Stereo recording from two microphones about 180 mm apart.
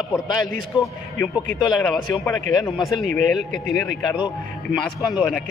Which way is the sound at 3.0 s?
45° right (ahead or behind).